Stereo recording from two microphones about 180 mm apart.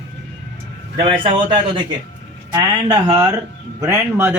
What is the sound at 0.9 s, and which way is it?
A man's voice, 30° right (ahead or behind).